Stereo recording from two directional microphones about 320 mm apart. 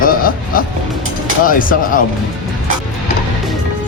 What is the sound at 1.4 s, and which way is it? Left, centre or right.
Speech, left.